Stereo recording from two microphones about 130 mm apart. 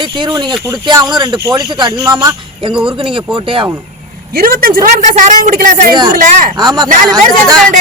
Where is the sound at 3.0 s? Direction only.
40° right (ahead or behind).